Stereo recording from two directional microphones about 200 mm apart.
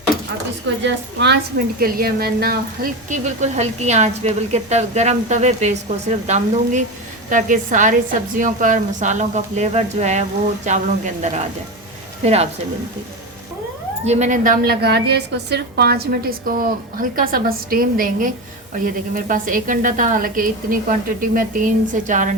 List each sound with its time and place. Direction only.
0.8 s a woman's voice: 60° right (ahead or behind); by 12.5 s 30° right (ahead or behind)
14.0 s a woman's voice: 35° right (ahead or behind)